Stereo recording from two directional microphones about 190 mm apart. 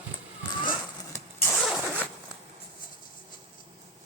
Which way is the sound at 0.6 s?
25° left (ahead or behind).